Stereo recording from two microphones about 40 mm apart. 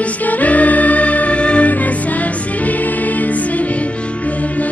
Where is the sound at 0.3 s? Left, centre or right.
Left.